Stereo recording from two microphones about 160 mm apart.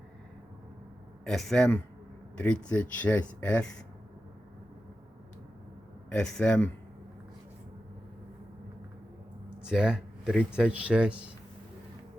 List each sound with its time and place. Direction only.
1.2 s speech: centre (ahead or behind)
6.1 s speech: 5° left (ahead or behind)
9.6 s speech: 5° right (ahead or behind)